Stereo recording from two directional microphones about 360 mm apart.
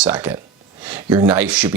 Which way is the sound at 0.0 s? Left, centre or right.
Centre.